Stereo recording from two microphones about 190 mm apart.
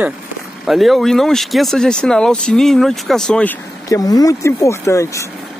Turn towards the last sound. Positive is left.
turn(degrees=15)  # may be behind; listen again after turning